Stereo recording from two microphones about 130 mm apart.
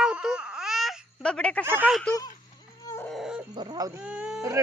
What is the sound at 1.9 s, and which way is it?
Speech, 5° left (ahead or behind).